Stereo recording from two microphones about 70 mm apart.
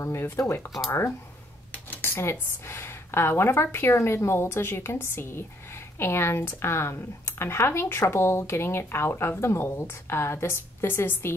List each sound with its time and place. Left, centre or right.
0.0 s speech: left
1.7 s speech: left